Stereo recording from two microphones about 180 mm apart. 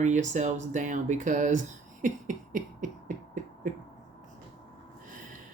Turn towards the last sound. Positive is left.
turn(degrees=-45)  # may be behind; listen again after turning